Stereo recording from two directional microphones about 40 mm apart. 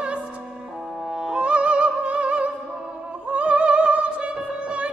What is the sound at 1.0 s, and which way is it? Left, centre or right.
Music, centre.